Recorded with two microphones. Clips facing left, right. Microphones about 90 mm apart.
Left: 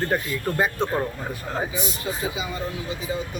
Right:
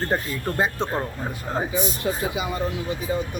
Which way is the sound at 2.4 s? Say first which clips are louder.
Right 3 dB; 55° right (ahead or behind).